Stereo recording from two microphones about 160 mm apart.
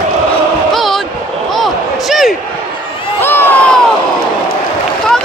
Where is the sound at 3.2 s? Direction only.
15° left (ahead or behind).